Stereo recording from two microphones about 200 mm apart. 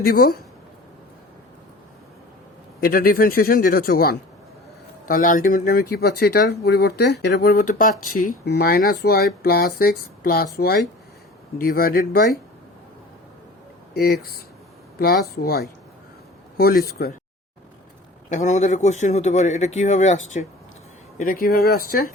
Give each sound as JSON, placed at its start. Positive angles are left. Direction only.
{"t": 0.0, "sound": "speech", "side_deg": 50}
{"t": 2.8, "sound": "speech", "side_deg": 50}
{"t": 13.9, "sound": "speech", "side_deg": 50}
{"t": 18.3, "sound": "speech", "side_deg": 35}